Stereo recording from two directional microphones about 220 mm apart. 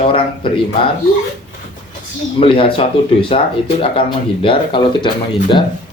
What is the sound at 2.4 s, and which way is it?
Speech, 25° left (ahead or behind).